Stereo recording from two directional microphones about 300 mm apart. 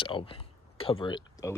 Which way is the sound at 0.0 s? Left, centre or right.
Centre.